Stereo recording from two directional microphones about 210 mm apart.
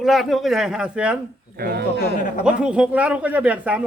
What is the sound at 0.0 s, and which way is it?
Speech, centre (ahead or behind).